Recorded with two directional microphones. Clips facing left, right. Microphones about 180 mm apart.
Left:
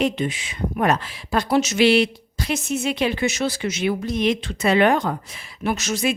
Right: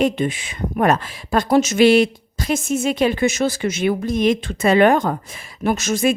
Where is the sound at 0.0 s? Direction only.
50° right (ahead or behind).